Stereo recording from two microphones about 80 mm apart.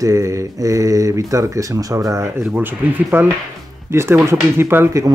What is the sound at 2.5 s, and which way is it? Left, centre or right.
Speech, right.